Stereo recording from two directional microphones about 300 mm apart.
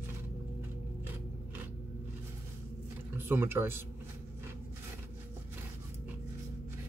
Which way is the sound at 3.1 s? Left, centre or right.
Centre.